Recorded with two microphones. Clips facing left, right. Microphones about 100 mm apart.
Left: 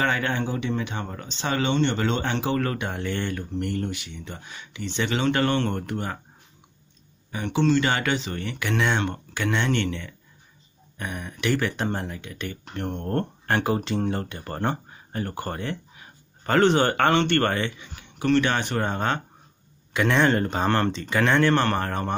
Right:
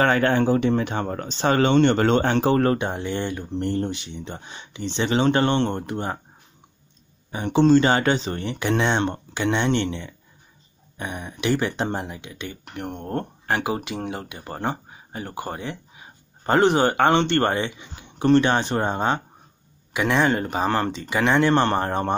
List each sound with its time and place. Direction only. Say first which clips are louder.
0.0 s speech: right 6 dB; 45° right (ahead or behind); by 6.2 s 25° right (ahead or behind)
7.2 s speech: right 5 dB; 30° right (ahead or behind)